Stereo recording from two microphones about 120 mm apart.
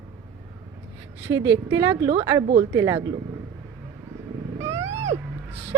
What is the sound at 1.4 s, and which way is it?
Speech, 20° right (ahead or behind).